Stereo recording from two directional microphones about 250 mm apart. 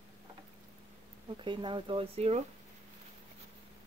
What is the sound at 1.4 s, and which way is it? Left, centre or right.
Speech, centre.